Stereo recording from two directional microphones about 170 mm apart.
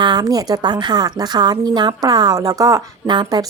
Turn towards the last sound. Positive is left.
turn(degrees=-25)  # may be behind; listen again after turning